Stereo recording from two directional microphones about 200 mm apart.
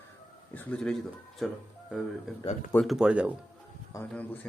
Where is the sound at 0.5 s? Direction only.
5° left (ahead or behind).